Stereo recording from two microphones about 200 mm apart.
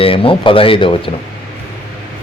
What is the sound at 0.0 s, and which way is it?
Speech, 25° left (ahead or behind).